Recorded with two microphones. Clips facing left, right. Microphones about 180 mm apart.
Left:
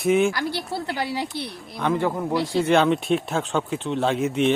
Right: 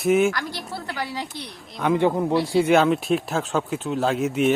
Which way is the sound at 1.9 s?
20° right (ahead or behind).